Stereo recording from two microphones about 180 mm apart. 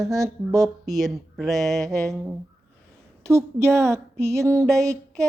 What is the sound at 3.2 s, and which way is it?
A woman's voice, 15° right (ahead or behind).